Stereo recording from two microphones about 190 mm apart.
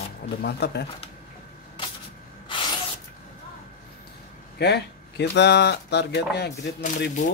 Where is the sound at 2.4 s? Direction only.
25° left (ahead or behind).